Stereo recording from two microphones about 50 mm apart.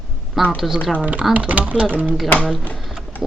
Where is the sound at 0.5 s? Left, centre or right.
Centre.